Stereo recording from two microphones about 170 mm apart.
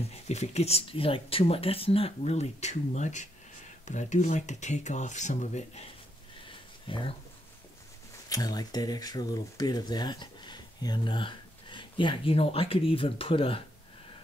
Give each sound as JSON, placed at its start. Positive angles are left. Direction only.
{"t": 0.1, "sound": "speech", "side_deg": 40}
{"t": 6.9, "sound": "speech", "side_deg": 30}
{"t": 8.3, "sound": "speech", "side_deg": 20}